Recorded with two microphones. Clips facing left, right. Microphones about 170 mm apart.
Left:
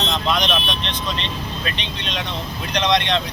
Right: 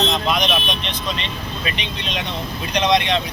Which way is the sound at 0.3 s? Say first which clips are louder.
Right 1 dB; 5° right (ahead or behind).